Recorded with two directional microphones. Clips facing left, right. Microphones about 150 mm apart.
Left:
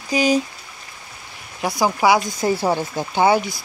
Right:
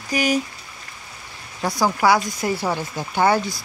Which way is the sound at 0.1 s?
25° left (ahead or behind).